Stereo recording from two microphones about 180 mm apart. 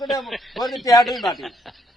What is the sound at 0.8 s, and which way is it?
Speech, 20° left (ahead or behind).